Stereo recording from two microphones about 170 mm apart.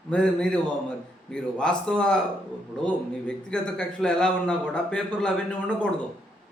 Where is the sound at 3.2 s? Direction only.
5° left (ahead or behind).